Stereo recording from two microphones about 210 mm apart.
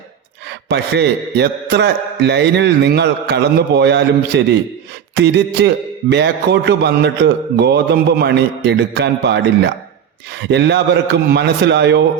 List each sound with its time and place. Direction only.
0.7 s a man's voice: 55° right (ahead or behind)